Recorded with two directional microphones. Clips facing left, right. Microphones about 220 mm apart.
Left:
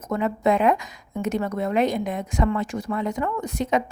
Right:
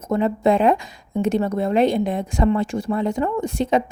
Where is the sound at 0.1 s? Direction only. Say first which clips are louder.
Right 4 dB; 30° right (ahead or behind).